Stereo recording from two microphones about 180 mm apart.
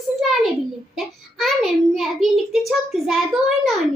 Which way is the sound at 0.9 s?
Centre (ahead or behind).